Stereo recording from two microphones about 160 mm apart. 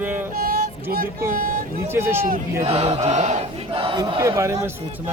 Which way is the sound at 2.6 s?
40° right (ahead or behind).